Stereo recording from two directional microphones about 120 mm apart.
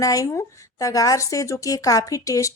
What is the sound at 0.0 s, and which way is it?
A woman's voice, 30° left (ahead or behind).